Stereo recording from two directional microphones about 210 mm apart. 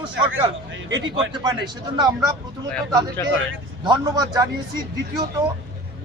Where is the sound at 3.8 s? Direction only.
20° right (ahead or behind).